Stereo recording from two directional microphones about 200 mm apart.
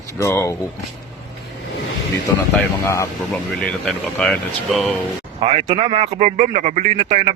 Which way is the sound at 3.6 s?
5° left (ahead or behind).